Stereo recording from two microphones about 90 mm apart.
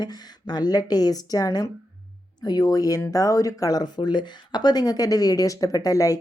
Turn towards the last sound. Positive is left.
turn(degrees=40)  # may be behind; listen again after turning